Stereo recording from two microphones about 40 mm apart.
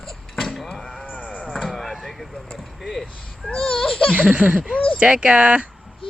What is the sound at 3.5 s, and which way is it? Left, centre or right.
Speech, centre.